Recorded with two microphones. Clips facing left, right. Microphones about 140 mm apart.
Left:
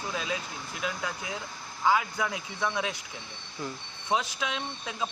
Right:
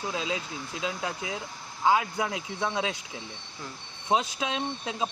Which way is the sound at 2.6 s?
20° right (ahead or behind).